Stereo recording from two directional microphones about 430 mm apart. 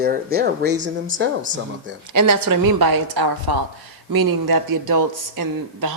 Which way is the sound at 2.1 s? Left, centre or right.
Right.